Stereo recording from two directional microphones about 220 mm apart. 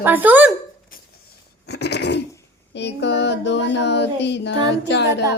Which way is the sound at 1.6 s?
50° left (ahead or behind).